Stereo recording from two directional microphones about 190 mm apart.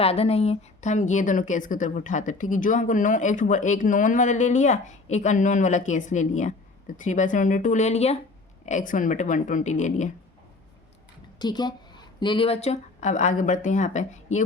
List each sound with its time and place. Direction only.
0.0 s a woman's voice: 30° left (ahead or behind)
11.3 s a woman's voice: 20° left (ahead or behind); by 14.4 s 40° left (ahead or behind)